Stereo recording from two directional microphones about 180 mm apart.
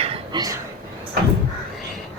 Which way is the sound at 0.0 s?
30° right (ahead or behind).